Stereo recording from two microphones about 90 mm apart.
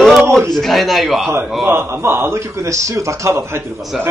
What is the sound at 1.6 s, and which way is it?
A man's voice, 25° right (ahead or behind).